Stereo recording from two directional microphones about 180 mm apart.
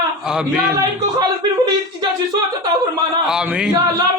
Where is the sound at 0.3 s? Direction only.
5° right (ahead or behind).